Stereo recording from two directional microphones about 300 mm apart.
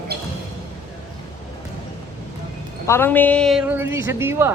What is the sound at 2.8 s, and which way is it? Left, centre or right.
Speech, centre.